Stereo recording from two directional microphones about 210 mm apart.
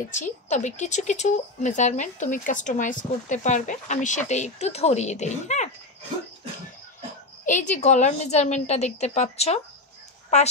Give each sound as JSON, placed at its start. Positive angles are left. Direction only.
{"t": 0.1, "sound": "speech", "side_deg": 35}
{"t": 7.4, "sound": "speech", "side_deg": 35}